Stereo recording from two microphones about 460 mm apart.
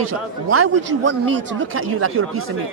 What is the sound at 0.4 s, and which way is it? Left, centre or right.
A man's voice, right.